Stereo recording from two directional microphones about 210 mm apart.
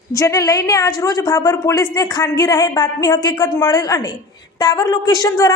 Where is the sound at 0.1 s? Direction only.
15° left (ahead or behind).